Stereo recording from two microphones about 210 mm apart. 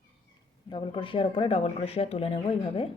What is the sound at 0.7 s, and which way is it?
Speech, 25° left (ahead or behind).